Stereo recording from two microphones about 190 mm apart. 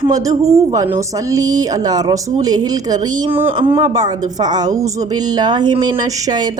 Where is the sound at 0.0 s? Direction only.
20° right (ahead or behind).